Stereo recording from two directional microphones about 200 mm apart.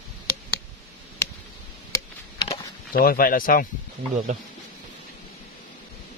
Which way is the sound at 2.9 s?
45° left (ahead or behind).